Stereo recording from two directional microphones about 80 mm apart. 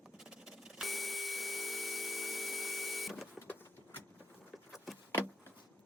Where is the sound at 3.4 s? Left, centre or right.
Left.